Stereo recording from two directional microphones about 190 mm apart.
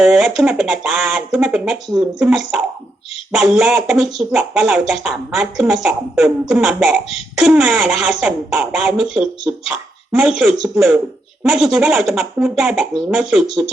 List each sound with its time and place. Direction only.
0.0 s speech: centre (ahead or behind)